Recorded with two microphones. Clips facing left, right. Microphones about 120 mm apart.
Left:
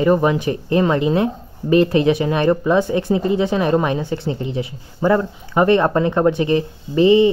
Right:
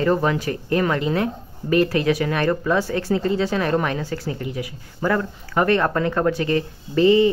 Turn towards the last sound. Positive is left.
turn(degrees=20)  # may be behind; listen again after turning